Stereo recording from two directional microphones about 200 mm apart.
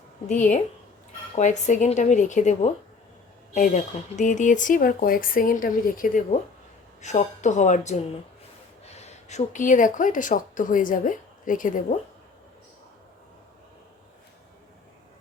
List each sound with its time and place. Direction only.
1.4 s speech: 35° left (ahead or behind)